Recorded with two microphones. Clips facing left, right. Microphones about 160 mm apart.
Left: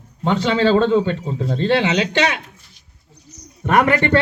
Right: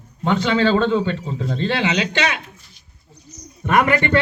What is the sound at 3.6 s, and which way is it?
Speech, 65° left (ahead or behind).